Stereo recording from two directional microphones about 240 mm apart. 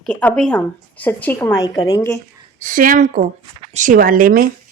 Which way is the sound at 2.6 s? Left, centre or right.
Right.